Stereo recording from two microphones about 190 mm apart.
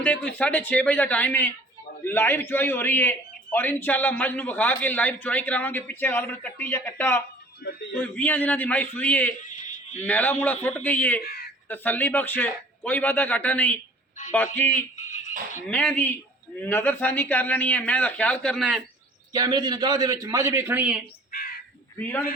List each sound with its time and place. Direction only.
0.3 s a man's voice: 5° left (ahead or behind)
7.6 s speech: 60° left (ahead or behind)
7.9 s a man's voice: 10° left (ahead or behind)
9.3 s a sound: 40° left (ahead or behind)
10.0 s a man's voice: 10° left (ahead or behind)
11.2 s speech: 55° left (ahead or behind)
11.7 s a man's voice: 10° left (ahead or behind)
14.7 s speech: 40° left (ahead or behind)
15.7 s a man's voice: 10° left (ahead or behind)
19.3 s a man's voice: 20° right (ahead or behind)